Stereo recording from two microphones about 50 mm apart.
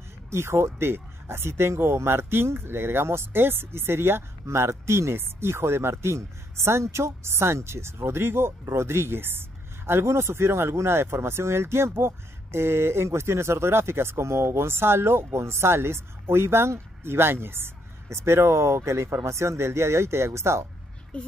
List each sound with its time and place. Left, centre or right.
0.3 s speech: right
21.1 s a child's voice: left